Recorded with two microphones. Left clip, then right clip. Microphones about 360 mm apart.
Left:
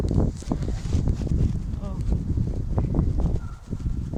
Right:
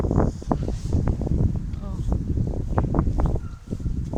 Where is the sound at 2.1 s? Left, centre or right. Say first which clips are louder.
Right 4 dB; right.